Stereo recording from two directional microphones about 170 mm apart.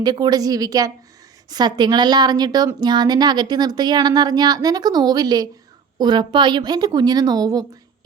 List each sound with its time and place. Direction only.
0.0 s a woman's voice: 25° right (ahead or behind)